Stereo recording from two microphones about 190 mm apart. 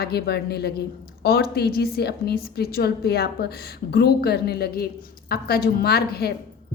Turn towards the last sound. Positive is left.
turn(degrees=55)  # may be behind; listen again after turning